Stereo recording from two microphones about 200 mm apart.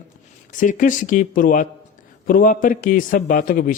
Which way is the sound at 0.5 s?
40° left (ahead or behind).